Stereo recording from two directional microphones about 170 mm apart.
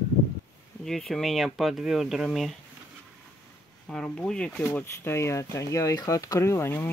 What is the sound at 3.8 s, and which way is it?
Speech, 5° left (ahead or behind).